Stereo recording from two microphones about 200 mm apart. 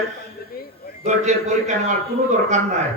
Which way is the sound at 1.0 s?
35° right (ahead or behind).